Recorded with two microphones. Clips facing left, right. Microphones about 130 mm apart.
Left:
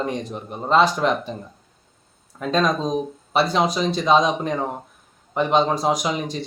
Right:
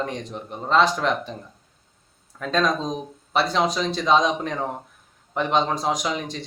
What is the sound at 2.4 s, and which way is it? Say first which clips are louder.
Speech: left 2 dB; 5° left (ahead or behind).